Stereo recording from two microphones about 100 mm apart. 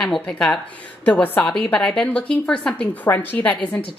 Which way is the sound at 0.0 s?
5° left (ahead or behind).